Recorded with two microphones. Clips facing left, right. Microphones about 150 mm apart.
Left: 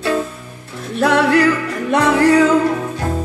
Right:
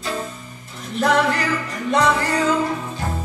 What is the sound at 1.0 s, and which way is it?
Music, 70° left (ahead or behind).